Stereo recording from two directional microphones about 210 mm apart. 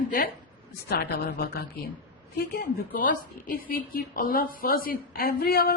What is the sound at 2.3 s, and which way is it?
Speech, 45° left (ahead or behind).